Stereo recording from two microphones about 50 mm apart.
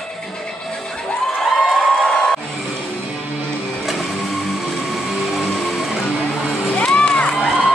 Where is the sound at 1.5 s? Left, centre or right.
Centre.